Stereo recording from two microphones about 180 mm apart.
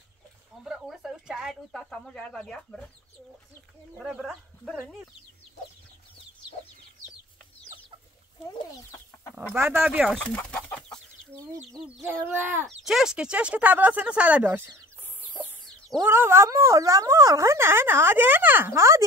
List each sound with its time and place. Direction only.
0.7 s speech: centre (ahead or behind)
4.0 s speech: 5° right (ahead or behind)
9.5 s speech: 10° right (ahead or behind)
9.8 s speech: centre (ahead or behind)
11.3 s speech: 15° right (ahead or behind)
16.0 s speech: 10° right (ahead or behind)